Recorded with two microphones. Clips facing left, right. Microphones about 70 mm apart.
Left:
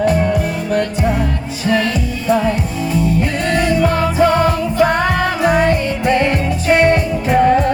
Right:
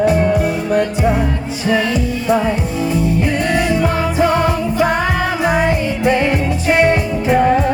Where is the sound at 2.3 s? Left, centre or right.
Centre.